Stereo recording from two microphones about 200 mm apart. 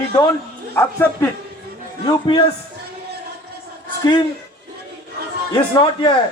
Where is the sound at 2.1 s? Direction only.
25° left (ahead or behind).